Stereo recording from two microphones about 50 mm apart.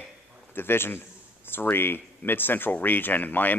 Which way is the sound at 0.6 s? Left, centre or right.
Left.